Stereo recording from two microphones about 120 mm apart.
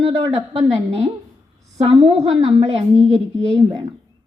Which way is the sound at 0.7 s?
60° right (ahead or behind).